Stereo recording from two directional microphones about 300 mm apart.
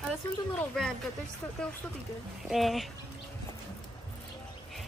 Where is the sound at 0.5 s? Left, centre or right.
Centre.